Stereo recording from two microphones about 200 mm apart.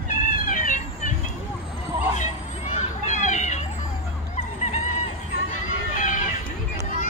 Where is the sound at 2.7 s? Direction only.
35° left (ahead or behind).